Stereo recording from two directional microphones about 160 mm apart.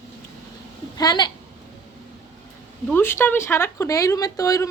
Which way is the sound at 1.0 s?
25° left (ahead or behind).